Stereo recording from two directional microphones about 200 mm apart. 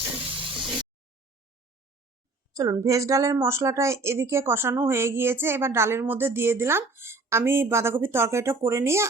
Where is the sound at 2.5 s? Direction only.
15° right (ahead or behind).